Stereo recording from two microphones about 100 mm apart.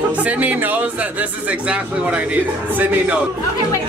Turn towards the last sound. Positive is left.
turn(degrees=-15)  # may be behind; listen again after turning